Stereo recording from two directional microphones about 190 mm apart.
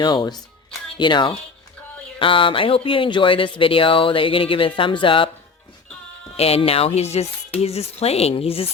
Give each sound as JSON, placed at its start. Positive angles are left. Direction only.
{"t": 0.0, "sound": "speech", "side_deg": 25}
{"t": 6.3, "sound": "speech", "side_deg": 30}